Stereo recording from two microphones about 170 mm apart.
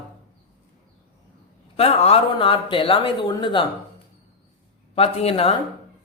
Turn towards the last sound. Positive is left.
turn(degrees=35)  # may be behind; listen again after turning